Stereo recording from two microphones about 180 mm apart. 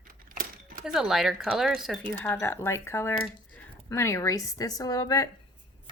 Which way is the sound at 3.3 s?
5° left (ahead or behind).